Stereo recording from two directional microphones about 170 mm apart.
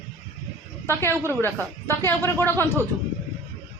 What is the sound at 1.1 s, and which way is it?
Speech, 15° right (ahead or behind).